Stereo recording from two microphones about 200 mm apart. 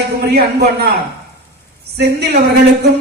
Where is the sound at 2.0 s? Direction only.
55° right (ahead or behind).